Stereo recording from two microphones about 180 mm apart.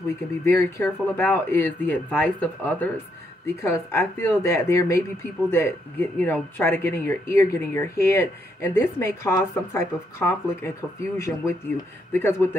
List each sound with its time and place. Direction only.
0.5 s speech: 15° left (ahead or behind)